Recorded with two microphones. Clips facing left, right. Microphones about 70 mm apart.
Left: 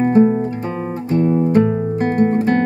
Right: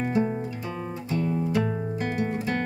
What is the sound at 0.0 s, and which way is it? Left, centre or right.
Music, left.